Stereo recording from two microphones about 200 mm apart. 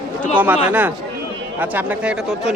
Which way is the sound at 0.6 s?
5° right (ahead or behind).